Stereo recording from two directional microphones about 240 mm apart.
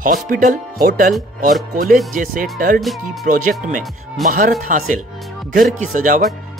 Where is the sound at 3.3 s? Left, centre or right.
Right.